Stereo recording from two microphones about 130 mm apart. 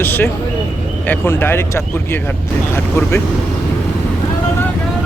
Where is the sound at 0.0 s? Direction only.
15° left (ahead or behind).